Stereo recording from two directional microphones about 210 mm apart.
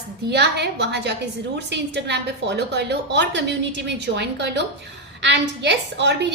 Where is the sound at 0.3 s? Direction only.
50° right (ahead or behind).